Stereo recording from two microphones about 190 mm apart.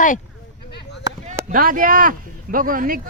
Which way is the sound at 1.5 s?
45° right (ahead or behind).